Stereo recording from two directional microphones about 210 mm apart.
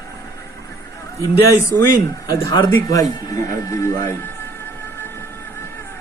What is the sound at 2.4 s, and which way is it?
Speech, 15° left (ahead or behind).